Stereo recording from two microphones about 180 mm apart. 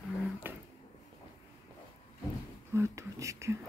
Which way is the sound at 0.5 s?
10° right (ahead or behind).